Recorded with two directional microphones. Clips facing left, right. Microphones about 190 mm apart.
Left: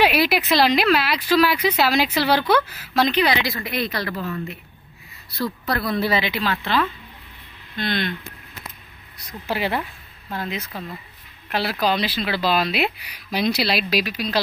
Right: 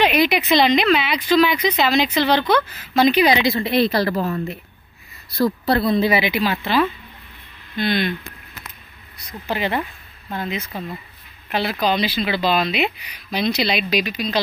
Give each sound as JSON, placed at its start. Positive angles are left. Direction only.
{"t": 0.0, "sound": "speech", "side_deg": 5}
{"t": 3.2, "sound": "a woman's voice", "side_deg": -15}
{"t": 5.7, "sound": "a woman's voice", "side_deg": -25}
{"t": 9.5, "sound": "speech", "side_deg": 5}